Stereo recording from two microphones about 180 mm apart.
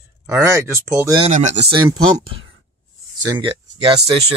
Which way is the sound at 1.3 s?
40° right (ahead or behind).